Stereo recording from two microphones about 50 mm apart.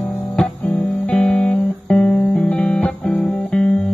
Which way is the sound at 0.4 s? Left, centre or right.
Centre.